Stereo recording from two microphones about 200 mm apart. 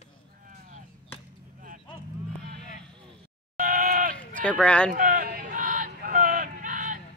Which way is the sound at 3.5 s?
40° right (ahead or behind).